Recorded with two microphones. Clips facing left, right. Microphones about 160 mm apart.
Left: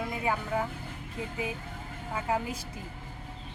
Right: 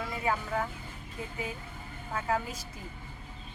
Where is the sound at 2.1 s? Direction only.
15° left (ahead or behind).